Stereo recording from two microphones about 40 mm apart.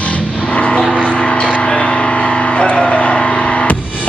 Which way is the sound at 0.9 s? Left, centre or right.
Left.